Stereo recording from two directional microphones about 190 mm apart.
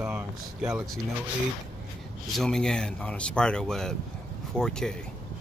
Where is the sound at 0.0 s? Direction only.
5° right (ahead or behind).